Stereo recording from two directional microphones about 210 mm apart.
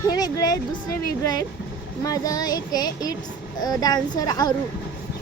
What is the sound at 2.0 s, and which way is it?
Speech, 15° left (ahead or behind).